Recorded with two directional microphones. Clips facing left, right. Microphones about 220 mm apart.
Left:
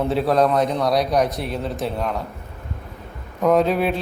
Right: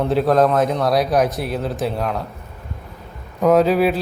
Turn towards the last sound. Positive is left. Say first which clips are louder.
# right 3 dB
turn(degrees=-5)  # may be behind; listen again after turning